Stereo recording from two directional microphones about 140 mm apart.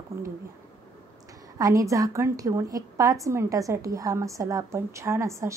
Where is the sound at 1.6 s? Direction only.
25° right (ahead or behind).